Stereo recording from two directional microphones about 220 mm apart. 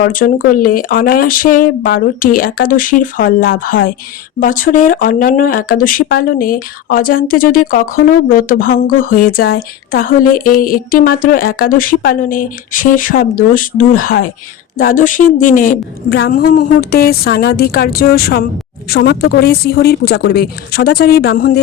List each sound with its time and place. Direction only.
0.0 s a woman's voice: 40° left (ahead or behind)